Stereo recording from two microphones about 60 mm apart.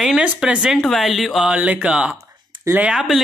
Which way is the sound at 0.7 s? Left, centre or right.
Centre.